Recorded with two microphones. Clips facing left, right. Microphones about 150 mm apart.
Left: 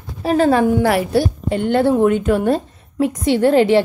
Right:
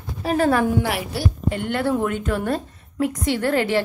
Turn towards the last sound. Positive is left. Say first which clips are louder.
# left 8 dB
turn(degrees=25)  # may be behind; listen again after turning